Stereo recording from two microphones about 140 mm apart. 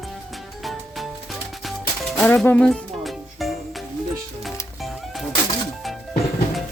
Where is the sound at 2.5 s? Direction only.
5° left (ahead or behind).